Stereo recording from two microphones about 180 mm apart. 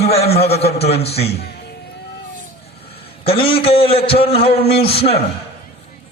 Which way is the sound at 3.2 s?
30° left (ahead or behind).